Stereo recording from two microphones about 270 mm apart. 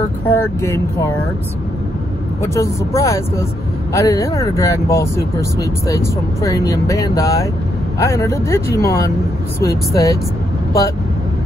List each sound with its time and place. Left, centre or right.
0.3 s speech: centre
2.5 s speech: centre